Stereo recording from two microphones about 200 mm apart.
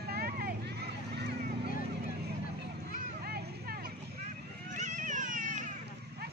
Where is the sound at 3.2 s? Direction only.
50° right (ahead or behind).